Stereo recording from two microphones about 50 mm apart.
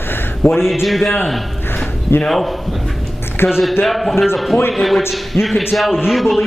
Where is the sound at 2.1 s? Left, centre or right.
Left.